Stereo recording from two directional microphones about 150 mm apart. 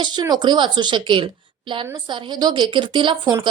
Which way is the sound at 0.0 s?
30° right (ahead or behind).